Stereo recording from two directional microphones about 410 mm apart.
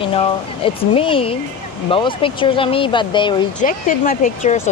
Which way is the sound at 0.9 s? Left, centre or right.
Centre.